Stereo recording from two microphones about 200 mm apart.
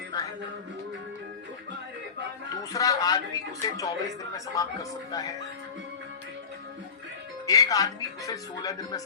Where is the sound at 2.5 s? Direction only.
15° left (ahead or behind).